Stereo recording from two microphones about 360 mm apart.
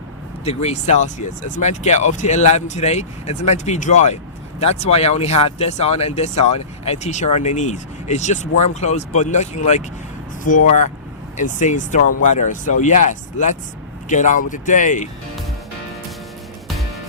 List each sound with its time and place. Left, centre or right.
0.4 s speech: centre
10.5 s speech: left
11.3 s speech: centre